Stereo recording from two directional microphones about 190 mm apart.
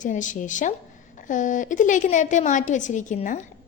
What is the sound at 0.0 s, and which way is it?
A woman's voice, 40° left (ahead or behind).